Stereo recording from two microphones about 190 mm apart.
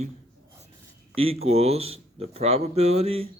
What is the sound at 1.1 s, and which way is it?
Speech, 30° right (ahead or behind).